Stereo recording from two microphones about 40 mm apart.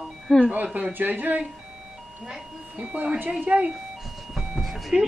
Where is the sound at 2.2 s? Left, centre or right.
Right.